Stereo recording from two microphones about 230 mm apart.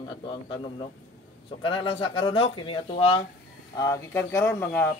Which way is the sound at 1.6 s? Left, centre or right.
Left.